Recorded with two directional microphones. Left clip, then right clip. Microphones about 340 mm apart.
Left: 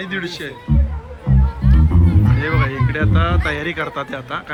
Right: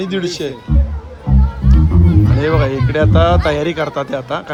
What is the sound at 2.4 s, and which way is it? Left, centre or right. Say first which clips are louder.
Speech: right 5 dB; centre.